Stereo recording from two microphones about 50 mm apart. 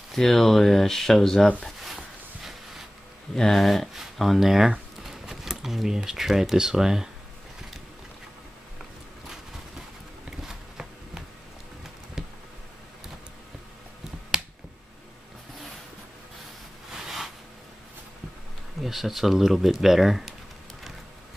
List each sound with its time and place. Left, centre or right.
0.1 s speech: centre
3.3 s speech: centre
10.4 s a sound: centre
14.3 s finger snapping: centre
16.9 s a sound: centre
18.8 s speech: centre